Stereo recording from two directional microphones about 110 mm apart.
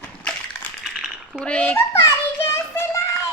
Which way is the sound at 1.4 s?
10° left (ahead or behind).